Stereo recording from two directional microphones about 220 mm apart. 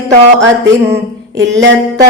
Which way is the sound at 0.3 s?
55° right (ahead or behind).